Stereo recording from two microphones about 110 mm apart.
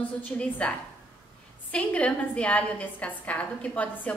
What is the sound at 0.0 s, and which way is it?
A woman's voice, 10° left (ahead or behind).